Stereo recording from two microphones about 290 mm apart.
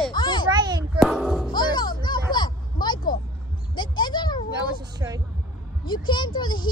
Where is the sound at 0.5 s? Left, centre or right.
Centre.